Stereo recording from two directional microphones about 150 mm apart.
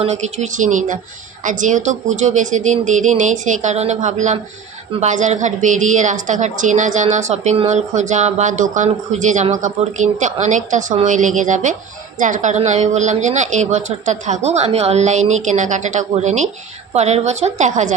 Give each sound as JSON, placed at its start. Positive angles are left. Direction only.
{"t": 0.0, "sound": "a woman's voice", "side_deg": -50}